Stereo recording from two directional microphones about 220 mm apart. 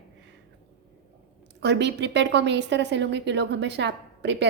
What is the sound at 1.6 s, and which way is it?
A woman's voice, 50° right (ahead or behind).